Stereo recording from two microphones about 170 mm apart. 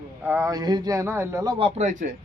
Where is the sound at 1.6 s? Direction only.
35° right (ahead or behind).